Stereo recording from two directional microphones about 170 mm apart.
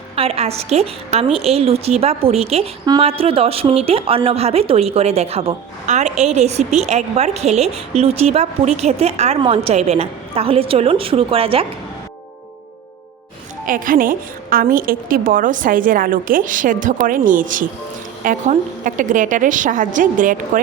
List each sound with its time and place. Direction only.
0.2 s a woman's voice: 35° right (ahead or behind)
13.7 s a woman's voice: 55° right (ahead or behind)